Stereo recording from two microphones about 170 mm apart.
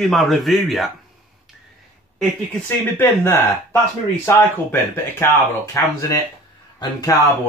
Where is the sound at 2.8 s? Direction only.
15° left (ahead or behind).